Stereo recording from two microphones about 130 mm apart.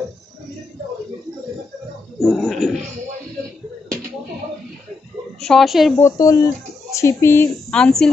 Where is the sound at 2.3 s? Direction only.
Centre (ahead or behind).